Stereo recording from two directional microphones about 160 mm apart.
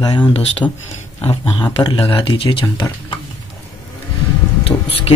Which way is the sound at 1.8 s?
30° left (ahead or behind).